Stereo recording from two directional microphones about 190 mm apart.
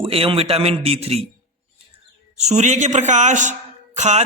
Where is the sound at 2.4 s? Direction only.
35° right (ahead or behind).